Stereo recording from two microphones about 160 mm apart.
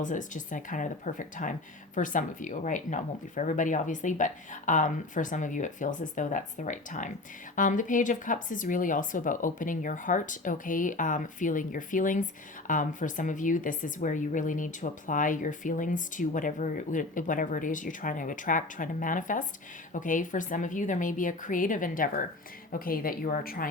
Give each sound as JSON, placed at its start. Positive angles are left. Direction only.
{"t": 0.0, "sound": "speech", "side_deg": 55}